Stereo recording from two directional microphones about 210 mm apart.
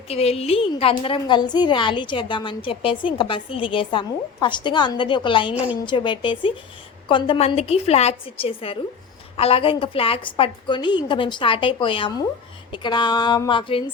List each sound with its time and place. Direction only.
0.1 s a woman's voice: 30° left (ahead or behind)